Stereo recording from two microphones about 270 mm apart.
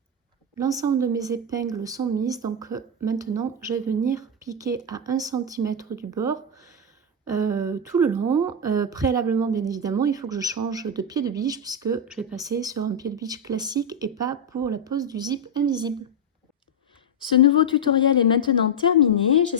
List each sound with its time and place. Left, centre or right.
0.5 s a woman's voice: centre
17.2 s speech: centre